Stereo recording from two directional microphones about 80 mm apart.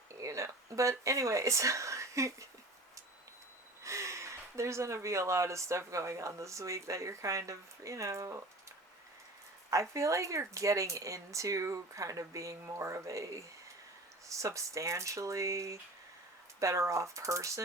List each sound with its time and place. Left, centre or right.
0.1 s speech: right
3.8 s speech: right
9.6 s speech: right